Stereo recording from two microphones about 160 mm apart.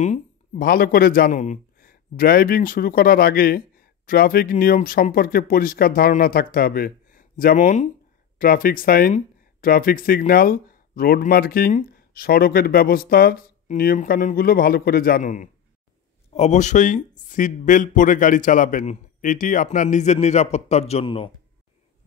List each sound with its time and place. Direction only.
0.0 s speech: 55° left (ahead or behind)
8.4 s speech: 60° left (ahead or behind); by 21.3 s 35° left (ahead or behind)